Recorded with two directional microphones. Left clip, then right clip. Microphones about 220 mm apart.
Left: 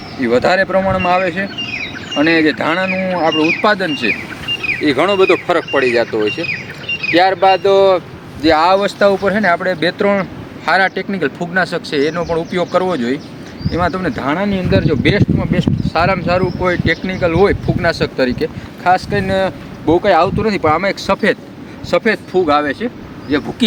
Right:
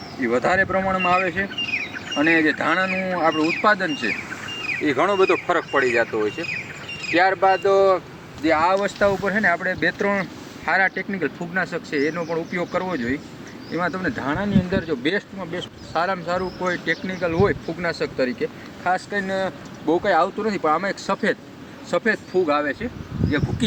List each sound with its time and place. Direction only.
0.2 s speech: 10° left (ahead or behind)
13.7 s speech: 5° left (ahead or behind)